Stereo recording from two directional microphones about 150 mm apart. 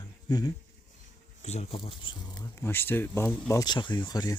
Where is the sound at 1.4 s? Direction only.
45° left (ahead or behind).